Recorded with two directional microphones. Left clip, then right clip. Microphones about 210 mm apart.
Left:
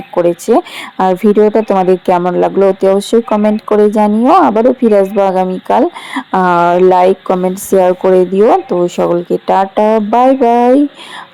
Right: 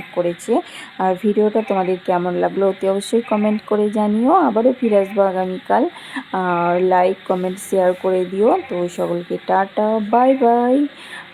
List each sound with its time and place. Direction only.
0.1 s speech: 25° left (ahead or behind)